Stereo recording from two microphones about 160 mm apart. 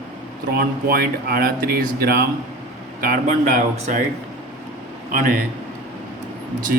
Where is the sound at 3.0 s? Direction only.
60° right (ahead or behind).